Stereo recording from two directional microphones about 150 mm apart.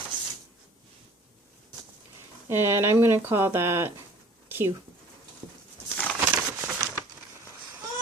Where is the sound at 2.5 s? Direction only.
15° right (ahead or behind).